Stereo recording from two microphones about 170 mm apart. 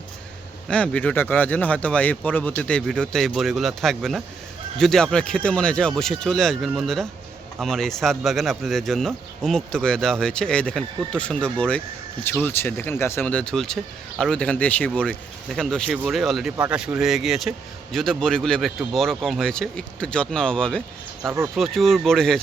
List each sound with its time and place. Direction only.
0.7 s speech: 5° left (ahead or behind)